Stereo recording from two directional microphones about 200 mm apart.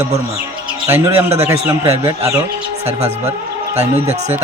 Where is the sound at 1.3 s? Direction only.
15° right (ahead or behind).